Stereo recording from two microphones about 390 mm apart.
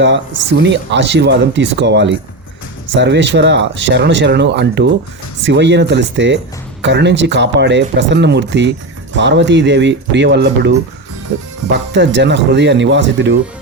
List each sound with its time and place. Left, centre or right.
0.0 s speech: right